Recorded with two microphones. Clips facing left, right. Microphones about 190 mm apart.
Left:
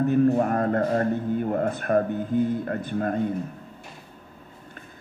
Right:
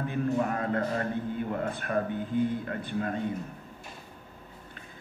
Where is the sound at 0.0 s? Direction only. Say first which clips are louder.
Left 8 dB; 45° left (ahead or behind).